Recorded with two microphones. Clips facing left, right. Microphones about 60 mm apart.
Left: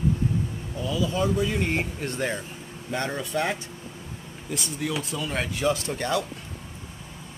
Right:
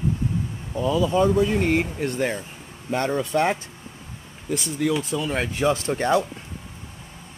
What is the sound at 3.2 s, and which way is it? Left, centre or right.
Speech, right.